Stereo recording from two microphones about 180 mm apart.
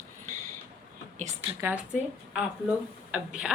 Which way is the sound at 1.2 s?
40° right (ahead or behind).